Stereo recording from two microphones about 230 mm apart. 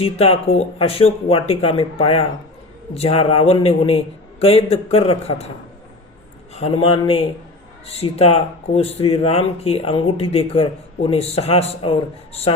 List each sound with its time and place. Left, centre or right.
0.0 s speech: left
6.5 s speech: left